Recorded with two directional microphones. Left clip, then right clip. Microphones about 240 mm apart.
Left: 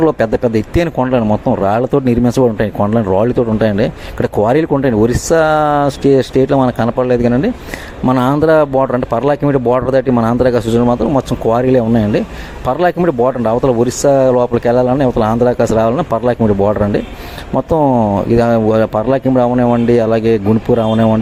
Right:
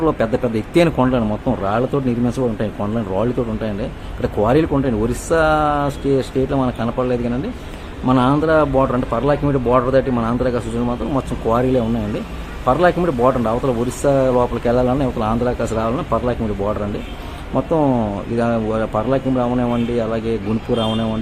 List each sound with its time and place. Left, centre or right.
0.0 s speech: left